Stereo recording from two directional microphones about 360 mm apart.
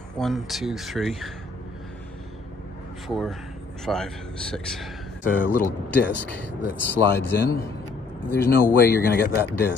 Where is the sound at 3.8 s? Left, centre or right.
Centre.